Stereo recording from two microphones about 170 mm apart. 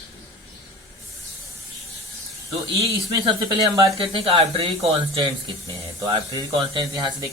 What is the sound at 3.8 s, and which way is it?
Speech, 35° right (ahead or behind).